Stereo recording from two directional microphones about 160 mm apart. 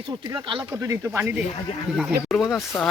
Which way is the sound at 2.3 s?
Centre (ahead or behind).